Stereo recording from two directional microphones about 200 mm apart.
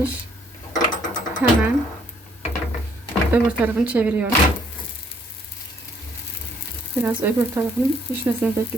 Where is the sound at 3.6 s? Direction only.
5° right (ahead or behind).